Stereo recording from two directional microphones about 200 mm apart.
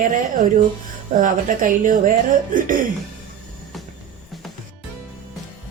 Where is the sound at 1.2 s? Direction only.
40° right (ahead or behind).